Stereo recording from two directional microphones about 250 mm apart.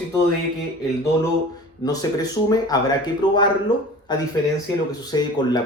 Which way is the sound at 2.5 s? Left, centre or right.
Centre.